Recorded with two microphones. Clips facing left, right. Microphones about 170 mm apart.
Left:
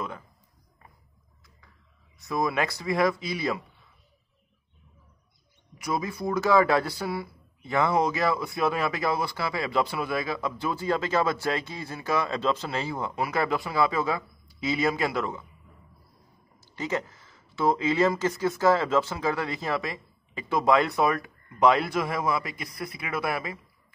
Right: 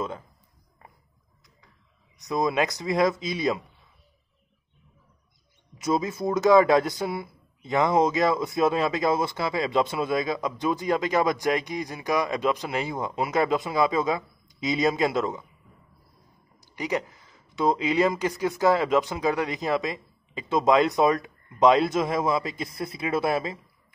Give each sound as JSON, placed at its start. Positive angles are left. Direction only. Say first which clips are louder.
{"t": 2.1, "sound": "speech", "louder": "right 3 dB", "side_deg": -20}
{"t": 5.8, "sound": "speech", "louder": "right 4 dB", "side_deg": -20}
{"t": 16.5, "sound": "speech", "louder": "right 2 dB", "side_deg": -15}